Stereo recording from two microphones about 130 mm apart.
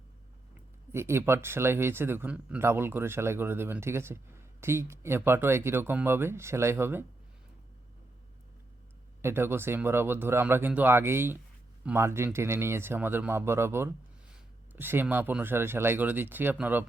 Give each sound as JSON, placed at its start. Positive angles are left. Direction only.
{"t": 0.9, "sound": "speech", "side_deg": -20}
{"t": 9.2, "sound": "speech", "side_deg": -20}